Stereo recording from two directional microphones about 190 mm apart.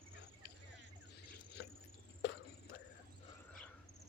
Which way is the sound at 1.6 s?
60° left (ahead or behind).